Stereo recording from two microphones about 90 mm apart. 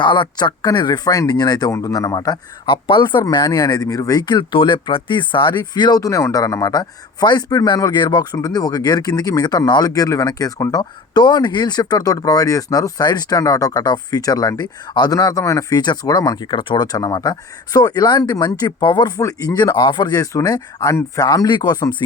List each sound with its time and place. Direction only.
0.0 s a man's voice: 60° left (ahead or behind)
6.0 s a man's voice: 40° left (ahead or behind)
15.8 s a man's voice: 50° left (ahead or behind)
16.5 s speech: 65° left (ahead or behind)
16.8 s a man's voice: 45° left (ahead or behind)
19.1 s a man's voice: 40° left (ahead or behind)
19.7 s a man's voice: 60° left (ahead or behind)